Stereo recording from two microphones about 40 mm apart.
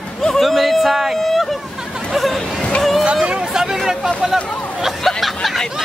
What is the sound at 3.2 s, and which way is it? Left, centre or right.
Speech, right.